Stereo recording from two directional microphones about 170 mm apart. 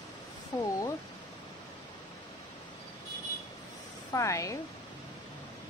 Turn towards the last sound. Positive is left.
turn(degrees=20)  # may be behind; listen again after turning